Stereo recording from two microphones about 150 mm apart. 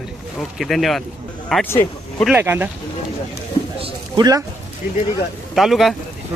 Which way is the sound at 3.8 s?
25° right (ahead or behind).